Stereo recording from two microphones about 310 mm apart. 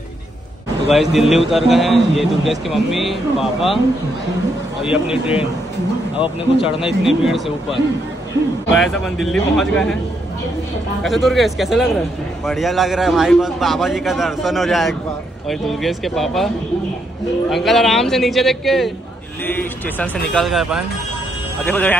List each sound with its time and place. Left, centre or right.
1.3 s a man's voice: centre
4.8 s a man's voice: centre
6.2 s speech: centre
6.9 s a man's voice: centre
11.0 s a man's voice: centre
17.5 s a man's voice: centre